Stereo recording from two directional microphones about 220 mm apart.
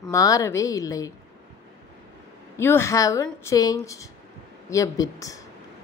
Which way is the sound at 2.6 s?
10° left (ahead or behind).